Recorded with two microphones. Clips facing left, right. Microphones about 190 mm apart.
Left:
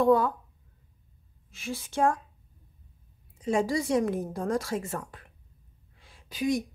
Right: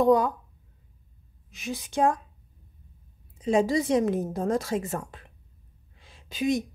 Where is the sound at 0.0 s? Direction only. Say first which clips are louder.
Right 2 dB; 15° right (ahead or behind).